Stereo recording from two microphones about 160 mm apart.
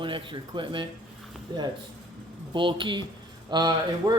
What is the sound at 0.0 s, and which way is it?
Speech, 30° right (ahead or behind).